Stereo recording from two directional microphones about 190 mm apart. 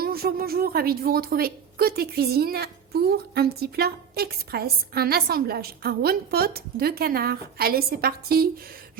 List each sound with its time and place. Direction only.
0.0 s a woman's voice: 55° right (ahead or behind)